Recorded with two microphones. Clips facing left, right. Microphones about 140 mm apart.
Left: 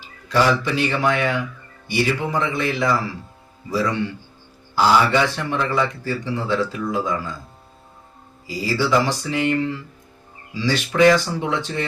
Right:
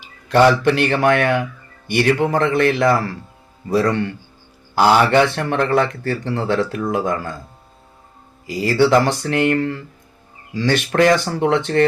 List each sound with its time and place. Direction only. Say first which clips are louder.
0.3 s a man's voice: right 6 dB; 60° right (ahead or behind)
8.4 s a man's voice: right 6 dB; 60° right (ahead or behind)